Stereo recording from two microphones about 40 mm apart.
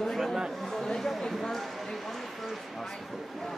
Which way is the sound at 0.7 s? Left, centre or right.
Centre.